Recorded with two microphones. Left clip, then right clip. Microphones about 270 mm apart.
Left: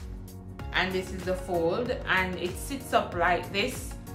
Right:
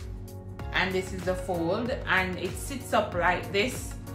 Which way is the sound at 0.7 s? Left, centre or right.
Centre.